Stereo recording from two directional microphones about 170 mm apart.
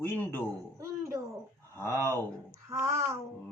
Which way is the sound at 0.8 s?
20° right (ahead or behind).